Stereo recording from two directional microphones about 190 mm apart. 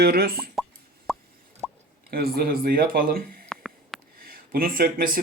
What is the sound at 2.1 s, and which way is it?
Speech, 55° right (ahead or behind).